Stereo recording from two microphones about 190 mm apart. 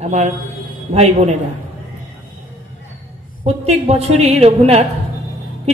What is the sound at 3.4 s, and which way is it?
Speech, 35° right (ahead or behind).